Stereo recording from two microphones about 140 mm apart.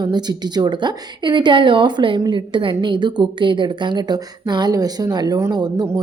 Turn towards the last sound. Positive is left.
turn(degrees=-30)  # may be behind; listen again after turning